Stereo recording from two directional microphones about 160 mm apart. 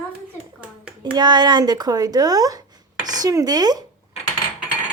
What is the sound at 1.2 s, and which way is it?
Speech, 25° right (ahead or behind).